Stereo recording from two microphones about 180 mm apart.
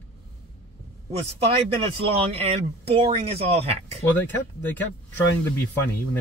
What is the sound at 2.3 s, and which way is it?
Speech, 30° right (ahead or behind).